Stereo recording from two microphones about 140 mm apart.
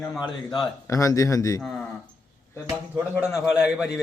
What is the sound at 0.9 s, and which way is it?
Speech, 25° left (ahead or behind).